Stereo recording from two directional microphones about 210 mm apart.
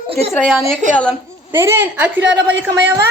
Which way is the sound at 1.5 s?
10° right (ahead or behind).